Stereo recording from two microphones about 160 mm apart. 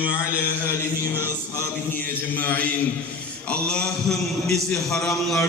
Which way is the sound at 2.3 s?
10° left (ahead or behind).